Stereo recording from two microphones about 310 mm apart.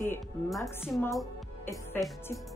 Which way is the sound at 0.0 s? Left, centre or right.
Centre.